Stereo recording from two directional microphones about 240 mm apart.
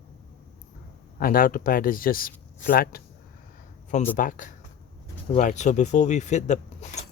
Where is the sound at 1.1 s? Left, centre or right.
Left.